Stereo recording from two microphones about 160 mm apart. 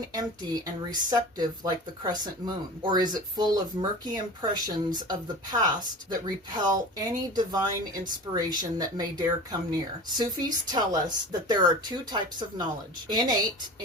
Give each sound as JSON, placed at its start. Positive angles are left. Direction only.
{"t": 0.1, "sound": "speech", "side_deg": -25}